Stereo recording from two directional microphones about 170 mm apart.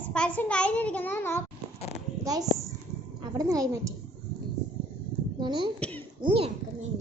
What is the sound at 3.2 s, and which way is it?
Speech, 20° right (ahead or behind).